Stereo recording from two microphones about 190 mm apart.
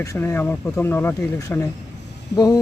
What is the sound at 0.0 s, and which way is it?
Speech, 15° left (ahead or behind).